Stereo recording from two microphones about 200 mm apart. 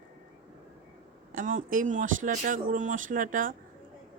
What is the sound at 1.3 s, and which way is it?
Speech, 40° right (ahead or behind).